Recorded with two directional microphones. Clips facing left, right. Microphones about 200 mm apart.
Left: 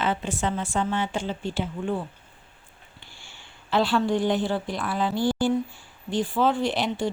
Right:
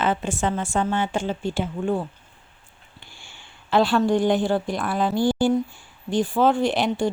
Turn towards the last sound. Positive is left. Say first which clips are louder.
# right 4 dB
turn(degrees=-50)  # may be behind; listen again after turning